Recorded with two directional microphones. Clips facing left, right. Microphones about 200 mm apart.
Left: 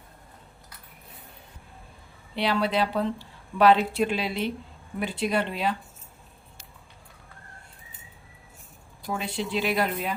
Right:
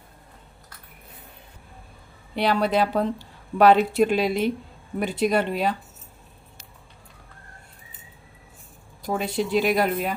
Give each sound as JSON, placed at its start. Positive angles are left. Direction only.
{"t": 2.3, "sound": "speech", "side_deg": -45}
{"t": 9.0, "sound": "speech", "side_deg": -40}